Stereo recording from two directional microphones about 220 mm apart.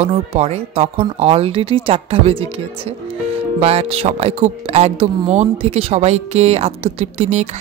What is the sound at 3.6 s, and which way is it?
A woman's voice, 30° right (ahead or behind).